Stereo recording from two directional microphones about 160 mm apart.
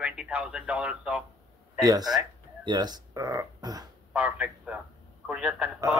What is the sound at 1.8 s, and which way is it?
Speech, 25° right (ahead or behind).